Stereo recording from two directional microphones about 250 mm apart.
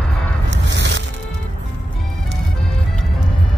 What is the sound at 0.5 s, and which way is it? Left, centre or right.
Music, right.